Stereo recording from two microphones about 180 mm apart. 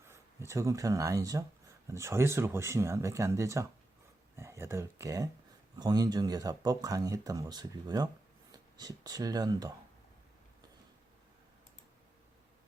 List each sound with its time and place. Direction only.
0.1 s speech: 15° right (ahead or behind)